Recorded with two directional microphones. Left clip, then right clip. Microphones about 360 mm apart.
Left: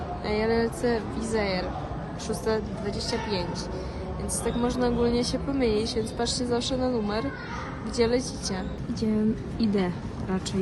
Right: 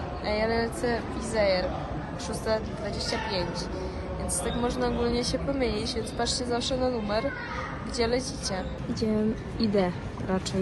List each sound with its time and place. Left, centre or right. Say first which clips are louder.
0.3 s speech: left 1 dB; centre
4.4 s a woman's voice: left 2 dB; centre